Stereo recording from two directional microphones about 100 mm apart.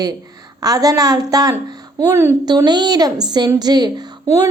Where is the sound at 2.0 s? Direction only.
25° right (ahead or behind).